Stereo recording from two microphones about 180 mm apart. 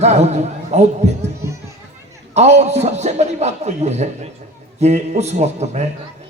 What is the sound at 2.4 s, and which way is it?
A man's voice, 40° right (ahead or behind).